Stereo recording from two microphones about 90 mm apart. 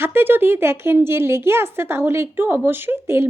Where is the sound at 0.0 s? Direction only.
25° right (ahead or behind).